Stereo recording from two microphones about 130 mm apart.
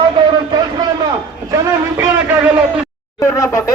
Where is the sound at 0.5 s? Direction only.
35° right (ahead or behind).